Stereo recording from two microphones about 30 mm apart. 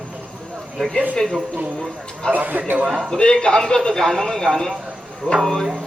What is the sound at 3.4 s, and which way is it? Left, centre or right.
Speech, left.